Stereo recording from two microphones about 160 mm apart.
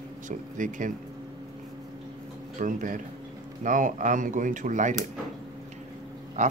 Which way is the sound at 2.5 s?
55° right (ahead or behind).